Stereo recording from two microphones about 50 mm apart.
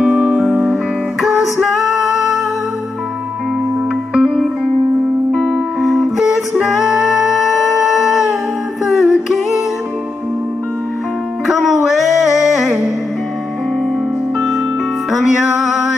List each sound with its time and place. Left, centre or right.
0.0 s music: centre
4.1 s music: centre
5.3 s music: centre
5.8 s music: centre
11.4 s music: centre
15.0 s music: centre